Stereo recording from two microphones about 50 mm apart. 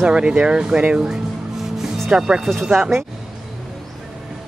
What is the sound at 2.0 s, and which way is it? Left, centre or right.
Speech, centre.